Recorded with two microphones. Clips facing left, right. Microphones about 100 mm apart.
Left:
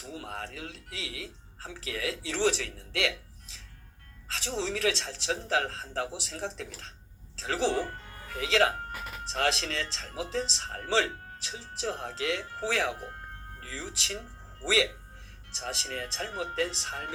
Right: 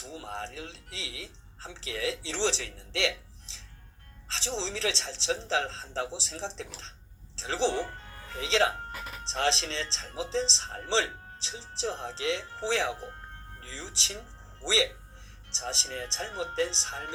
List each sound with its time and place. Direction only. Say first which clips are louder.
0.0 s music: right 1 dB; 25° right (ahead or behind)
4.3 s speech: left 2 dB; 25° right (ahead or behind)